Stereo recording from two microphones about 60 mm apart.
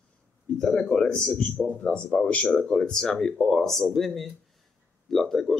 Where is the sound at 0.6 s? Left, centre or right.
Centre.